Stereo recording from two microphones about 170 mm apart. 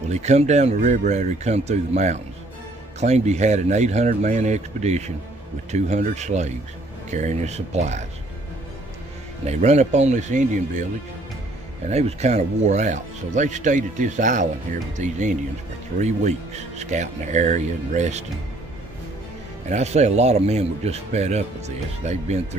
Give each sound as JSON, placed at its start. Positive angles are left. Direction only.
{"t": 0.1, "sound": "speech", "side_deg": -40}
{"t": 9.5, "sound": "speech", "side_deg": -40}
{"t": 11.9, "sound": "speech", "side_deg": -40}
{"t": 19.7, "sound": "speech", "side_deg": -40}